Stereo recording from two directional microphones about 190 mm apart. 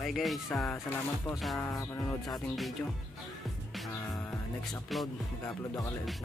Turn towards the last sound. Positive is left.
turn(degrees=15)  # may be behind; listen again after turning